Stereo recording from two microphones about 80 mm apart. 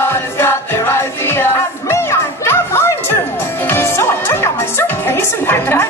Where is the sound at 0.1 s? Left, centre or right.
Left.